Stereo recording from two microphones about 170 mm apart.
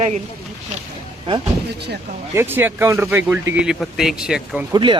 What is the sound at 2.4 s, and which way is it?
Speech, 10° right (ahead or behind).